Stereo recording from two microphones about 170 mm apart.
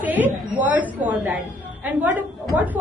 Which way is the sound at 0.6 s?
10° right (ahead or behind).